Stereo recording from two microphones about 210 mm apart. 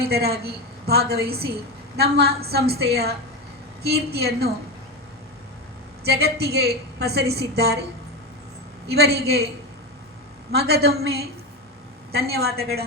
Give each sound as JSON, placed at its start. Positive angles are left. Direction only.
{"t": 0.0, "sound": "a woman's voice", "side_deg": -50}
{"t": 6.1, "sound": "a woman's voice", "side_deg": -50}
{"t": 8.9, "sound": "a woman's voice", "side_deg": -50}
{"t": 10.5, "sound": "a woman's voice", "side_deg": -50}
{"t": 12.3, "sound": "a woman's voice", "side_deg": -50}